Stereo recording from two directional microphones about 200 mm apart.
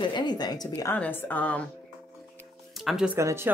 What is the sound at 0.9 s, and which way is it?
Speech, 10° left (ahead or behind).